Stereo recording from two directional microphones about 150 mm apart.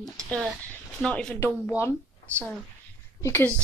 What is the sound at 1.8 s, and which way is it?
Speech, 20° left (ahead or behind).